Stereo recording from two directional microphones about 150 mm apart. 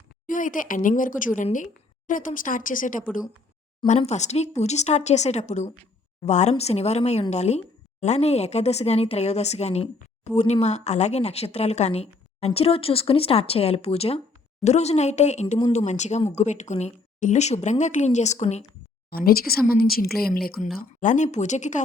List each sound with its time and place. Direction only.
0.3 s a woman's voice: 60° left (ahead or behind)
3.8 s speech: 45° left (ahead or behind)
19.1 s a woman's voice: 85° left
20.7 s speech: 60° left (ahead or behind)